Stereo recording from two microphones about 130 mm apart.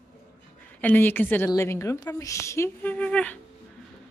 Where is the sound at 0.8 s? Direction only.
15° left (ahead or behind).